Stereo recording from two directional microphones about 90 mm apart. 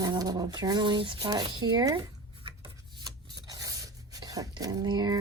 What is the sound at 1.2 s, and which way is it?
Speech, 45° right (ahead or behind).